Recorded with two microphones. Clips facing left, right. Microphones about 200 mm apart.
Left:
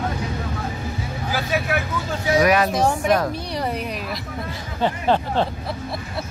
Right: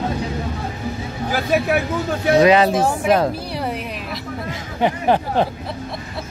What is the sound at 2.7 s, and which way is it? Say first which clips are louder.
Speech: right 1 dB; 5° right (ahead or behind).